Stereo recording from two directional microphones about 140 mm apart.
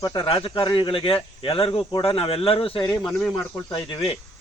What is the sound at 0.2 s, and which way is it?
A man's voice, 40° left (ahead or behind).